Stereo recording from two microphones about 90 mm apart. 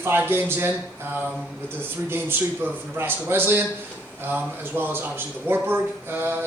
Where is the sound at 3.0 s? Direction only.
25° right (ahead or behind).